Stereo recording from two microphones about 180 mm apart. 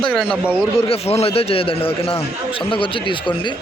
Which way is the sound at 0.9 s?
35° left (ahead or behind).